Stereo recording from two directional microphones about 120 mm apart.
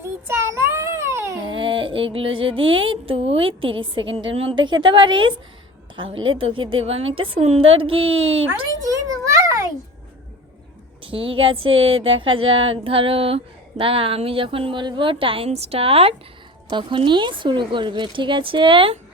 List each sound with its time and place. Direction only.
0.0 s child singing: 20° right (ahead or behind)
1.5 s a sound: 45° right (ahead or behind)
6.0 s female singing: 45° right (ahead or behind)
8.8 s a sound: 30° right (ahead or behind)
11.0 s female singing: 50° right (ahead or behind)
15.4 s a woman's voice: 60° right (ahead or behind)
16.6 s a woman's voice: 40° right (ahead or behind)
17.1 s female singing: 40° right (ahead or behind)